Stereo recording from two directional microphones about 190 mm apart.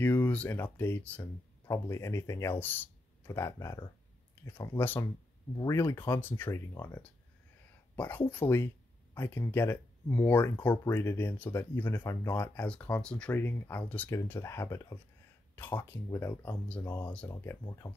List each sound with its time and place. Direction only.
0.0 s speech: 10° left (ahead or behind)